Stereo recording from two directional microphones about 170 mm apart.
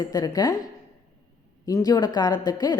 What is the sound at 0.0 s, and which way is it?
Speech, 25° left (ahead or behind).